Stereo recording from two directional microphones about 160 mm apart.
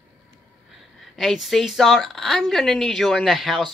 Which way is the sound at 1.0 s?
Centre (ahead or behind).